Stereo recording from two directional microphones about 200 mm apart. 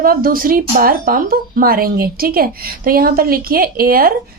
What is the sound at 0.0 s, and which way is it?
A woman's voice, 45° right (ahead or behind).